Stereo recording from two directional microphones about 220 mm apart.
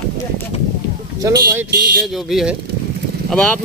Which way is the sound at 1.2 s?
15° right (ahead or behind).